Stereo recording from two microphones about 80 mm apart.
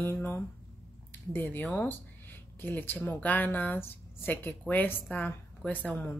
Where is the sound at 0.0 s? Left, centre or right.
Left.